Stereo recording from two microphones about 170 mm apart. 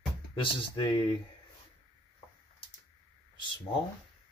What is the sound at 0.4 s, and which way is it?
Speech, 30° left (ahead or behind).